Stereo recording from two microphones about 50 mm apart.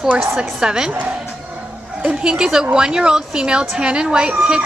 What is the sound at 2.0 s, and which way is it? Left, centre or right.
A woman's voice, centre.